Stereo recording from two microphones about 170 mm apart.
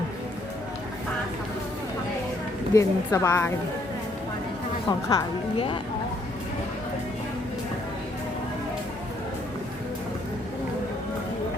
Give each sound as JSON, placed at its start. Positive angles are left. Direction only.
{"t": 2.7, "sound": "a woman's voice", "side_deg": 20}
{"t": 4.9, "sound": "a woman's voice", "side_deg": 25}